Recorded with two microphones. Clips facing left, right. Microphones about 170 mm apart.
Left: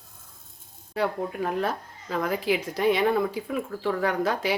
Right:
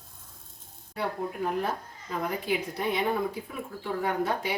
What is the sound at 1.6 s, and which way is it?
A woman's voice, 90° left.